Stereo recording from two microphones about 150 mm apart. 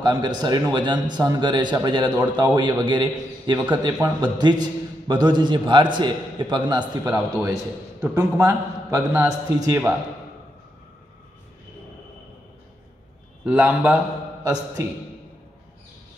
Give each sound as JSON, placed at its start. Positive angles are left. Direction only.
{"t": 0.0, "sound": "a man's voice", "side_deg": -30}
{"t": 13.5, "sound": "a man's voice", "side_deg": -10}
{"t": 14.4, "sound": "a man's voice", "side_deg": -25}